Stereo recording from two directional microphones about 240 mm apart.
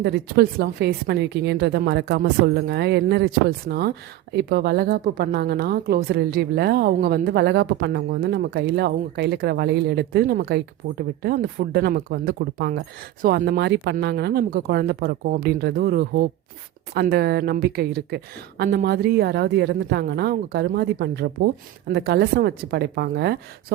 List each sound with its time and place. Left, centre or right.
0.0 s a woman's voice: right